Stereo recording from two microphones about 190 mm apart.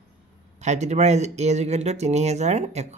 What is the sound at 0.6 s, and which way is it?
Speech, 35° right (ahead or behind).